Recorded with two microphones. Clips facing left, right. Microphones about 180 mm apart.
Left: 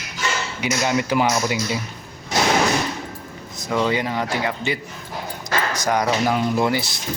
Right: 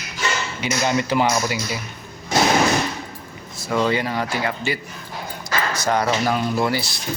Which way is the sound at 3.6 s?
5° right (ahead or behind).